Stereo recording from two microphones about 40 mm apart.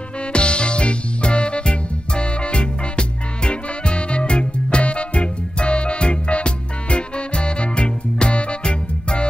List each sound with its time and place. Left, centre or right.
0.3 s music: left